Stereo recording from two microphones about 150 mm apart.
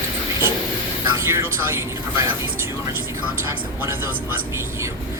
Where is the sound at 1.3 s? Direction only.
15° right (ahead or behind).